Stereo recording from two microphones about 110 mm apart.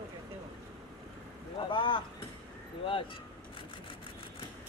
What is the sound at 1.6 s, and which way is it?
Speech, 50° left (ahead or behind).